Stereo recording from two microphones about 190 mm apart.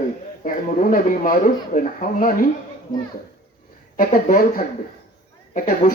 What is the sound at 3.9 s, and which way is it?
Speech, 50° left (ahead or behind).